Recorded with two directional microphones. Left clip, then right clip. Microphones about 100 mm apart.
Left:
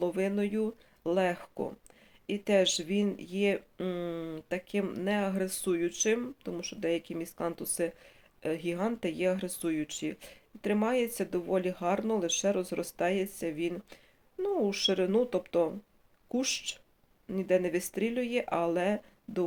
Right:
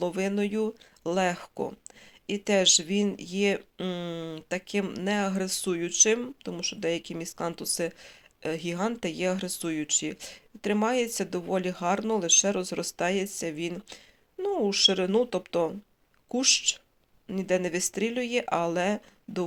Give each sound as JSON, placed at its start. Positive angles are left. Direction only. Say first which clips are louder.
{"t": 0.0, "sound": "speech", "louder": "right 2 dB", "side_deg": -25}